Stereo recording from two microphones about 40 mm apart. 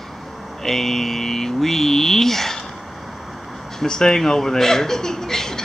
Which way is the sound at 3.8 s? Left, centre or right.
Centre.